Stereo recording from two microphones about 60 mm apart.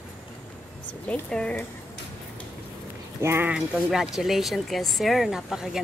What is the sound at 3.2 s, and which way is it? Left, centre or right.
Speech, right.